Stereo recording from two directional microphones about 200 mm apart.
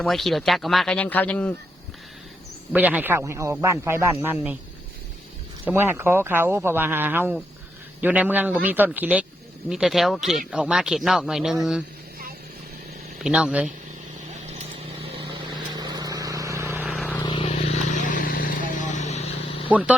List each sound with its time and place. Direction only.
0.0 s speech: centre (ahead or behind)
2.7 s speech: 10° right (ahead or behind)
5.6 s speech: 10° right (ahead or behind)
13.2 s speech: 5° right (ahead or behind)
15.0 s vehicle: 25° right (ahead or behind)
16.9 s vehicle: 10° left (ahead or behind)
17.2 s vehicle: 30° left (ahead or behind)
19.6 s speech: 5° right (ahead or behind)